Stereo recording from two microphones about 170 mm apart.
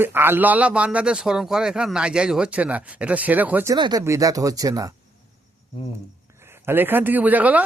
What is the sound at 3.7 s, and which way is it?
Speech, 25° right (ahead or behind).